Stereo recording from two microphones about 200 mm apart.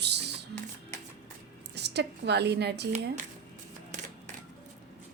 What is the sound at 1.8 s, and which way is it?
A woman's voice, 55° right (ahead or behind).